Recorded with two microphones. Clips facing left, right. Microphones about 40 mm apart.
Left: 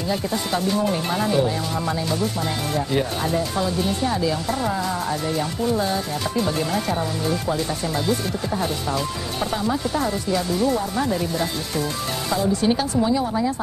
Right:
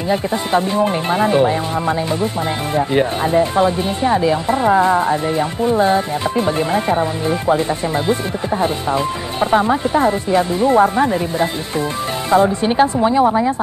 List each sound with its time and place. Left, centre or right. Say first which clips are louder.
0.1 s speech: right 8 dB; right
12.3 s speech: right 7 dB; right